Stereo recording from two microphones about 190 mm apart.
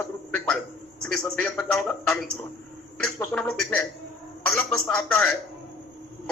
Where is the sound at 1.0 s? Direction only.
5° left (ahead or behind).